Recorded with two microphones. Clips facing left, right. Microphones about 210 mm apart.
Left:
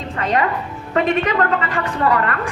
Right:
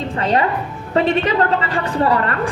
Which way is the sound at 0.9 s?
30° right (ahead or behind).